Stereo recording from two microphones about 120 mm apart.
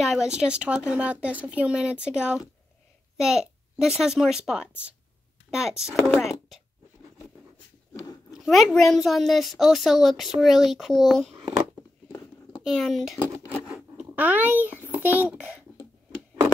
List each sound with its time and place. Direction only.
0.0 s a woman's voice: 5° right (ahead or behind)
7.9 s a sound: 30° left (ahead or behind)
8.4 s a woman's voice: centre (ahead or behind)
12.1 s a sound: 40° left (ahead or behind)
12.6 s a woman's voice: centre (ahead or behind)
13.9 s a child's voice: 15° right (ahead or behind)